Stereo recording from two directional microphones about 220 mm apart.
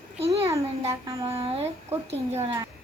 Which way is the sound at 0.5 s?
15° right (ahead or behind).